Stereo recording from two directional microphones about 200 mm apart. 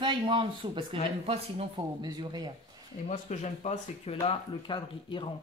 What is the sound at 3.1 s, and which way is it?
Speech, 35° left (ahead or behind).